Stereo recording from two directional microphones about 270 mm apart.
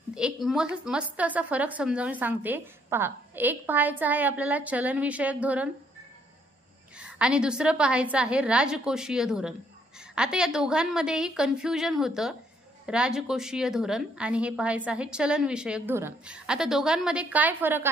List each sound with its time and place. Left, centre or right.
0.1 s a woman's voice: centre
7.0 s a woman's voice: centre